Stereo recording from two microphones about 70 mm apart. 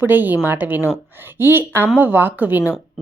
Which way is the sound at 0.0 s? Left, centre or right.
Right.